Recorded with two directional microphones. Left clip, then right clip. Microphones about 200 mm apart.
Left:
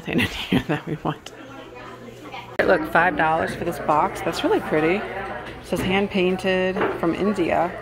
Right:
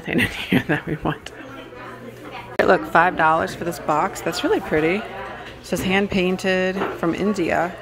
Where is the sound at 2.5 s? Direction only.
20° right (ahead or behind).